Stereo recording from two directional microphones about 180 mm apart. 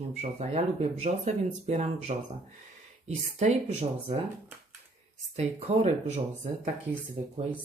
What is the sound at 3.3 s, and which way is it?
Speech, 35° right (ahead or behind).